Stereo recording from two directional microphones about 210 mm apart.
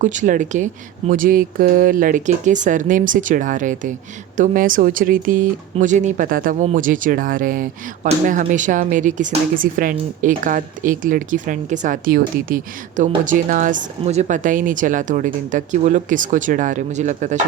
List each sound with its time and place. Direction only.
0.0 s speech: 35° right (ahead or behind)